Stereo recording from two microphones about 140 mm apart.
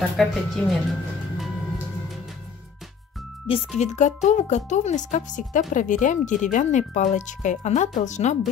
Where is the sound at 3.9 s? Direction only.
60° left (ahead or behind).